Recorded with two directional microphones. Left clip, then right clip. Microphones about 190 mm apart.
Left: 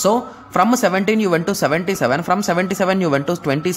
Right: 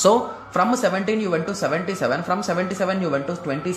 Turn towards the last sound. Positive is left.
turn(degrees=40)  # may be behind; listen again after turning